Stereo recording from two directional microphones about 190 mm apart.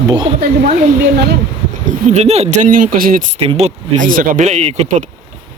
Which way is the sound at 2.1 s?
35° right (ahead or behind).